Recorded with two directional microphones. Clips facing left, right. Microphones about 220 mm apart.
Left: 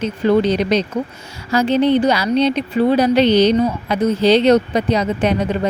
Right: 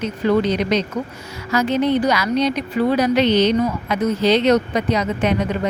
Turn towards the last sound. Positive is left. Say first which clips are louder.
# left 2 dB
turn(degrees=30)  # may be behind; listen again after turning